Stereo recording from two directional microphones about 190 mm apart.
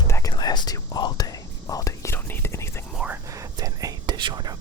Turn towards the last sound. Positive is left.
turn(degrees=-25)  # may be behind; listen again after turning